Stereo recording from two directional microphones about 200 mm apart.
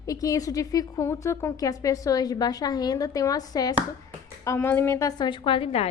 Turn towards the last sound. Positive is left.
turn(degrees=30)  # may be behind; listen again after turning